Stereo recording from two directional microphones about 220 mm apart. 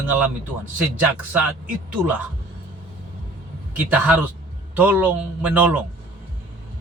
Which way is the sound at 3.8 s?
5° right (ahead or behind).